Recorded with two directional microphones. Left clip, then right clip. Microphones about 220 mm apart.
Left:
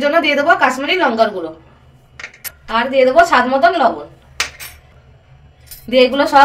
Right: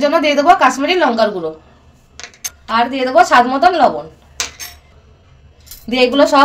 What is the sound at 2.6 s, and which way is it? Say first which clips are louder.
A woman's voice: left 3 dB; 45° right (ahead or behind).